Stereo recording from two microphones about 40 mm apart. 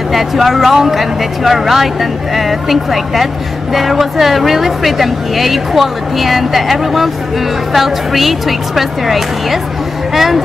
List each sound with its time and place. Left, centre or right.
0.1 s speech: centre